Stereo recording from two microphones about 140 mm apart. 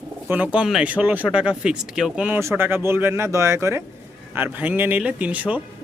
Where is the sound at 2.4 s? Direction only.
15° right (ahead or behind).